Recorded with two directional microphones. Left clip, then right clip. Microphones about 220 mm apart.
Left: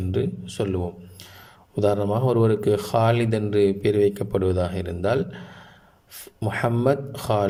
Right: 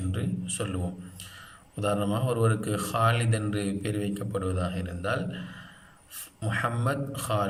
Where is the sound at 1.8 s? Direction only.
30° left (ahead or behind).